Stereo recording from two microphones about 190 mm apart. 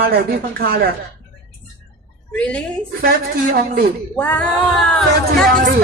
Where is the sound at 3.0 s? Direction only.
50° right (ahead or behind).